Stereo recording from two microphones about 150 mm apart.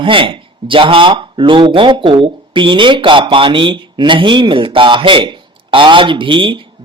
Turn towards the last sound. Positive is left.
turn(degrees=-35)  # may be behind; listen again after turning